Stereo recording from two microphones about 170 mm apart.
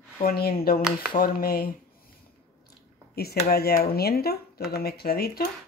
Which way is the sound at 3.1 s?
65° left (ahead or behind).